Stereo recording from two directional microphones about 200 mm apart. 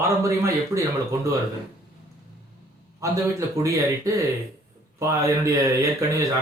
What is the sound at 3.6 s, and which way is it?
Speech, 15° right (ahead or behind).